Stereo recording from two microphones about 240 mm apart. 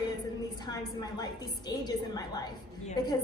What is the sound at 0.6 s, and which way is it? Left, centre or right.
A woman's voice, centre.